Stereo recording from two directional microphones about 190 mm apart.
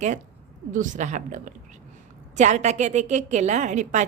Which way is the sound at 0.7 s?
40° right (ahead or behind).